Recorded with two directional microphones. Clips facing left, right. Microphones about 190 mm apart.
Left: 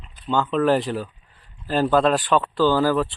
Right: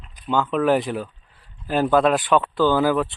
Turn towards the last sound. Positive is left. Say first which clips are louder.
# even
turn(degrees=-10)  # may be behind; listen again after turning